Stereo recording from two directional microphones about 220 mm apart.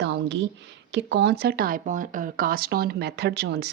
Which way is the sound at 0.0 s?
55° right (ahead or behind).